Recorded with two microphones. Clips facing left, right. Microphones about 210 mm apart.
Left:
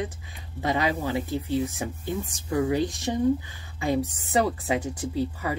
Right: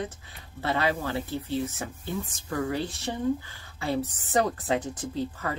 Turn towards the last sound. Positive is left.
turn(degrees=10)  # may be behind; listen again after turning